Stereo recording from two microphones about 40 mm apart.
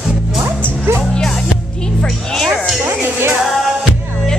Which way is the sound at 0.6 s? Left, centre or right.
Left.